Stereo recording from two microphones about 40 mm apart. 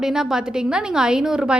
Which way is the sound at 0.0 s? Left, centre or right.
Centre.